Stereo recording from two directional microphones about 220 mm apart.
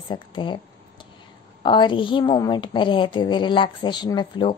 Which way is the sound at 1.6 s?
20° left (ahead or behind).